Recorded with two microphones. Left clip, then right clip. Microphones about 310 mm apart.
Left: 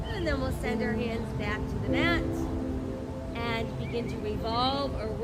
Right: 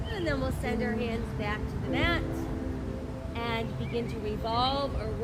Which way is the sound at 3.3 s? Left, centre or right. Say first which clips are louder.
Even; centre.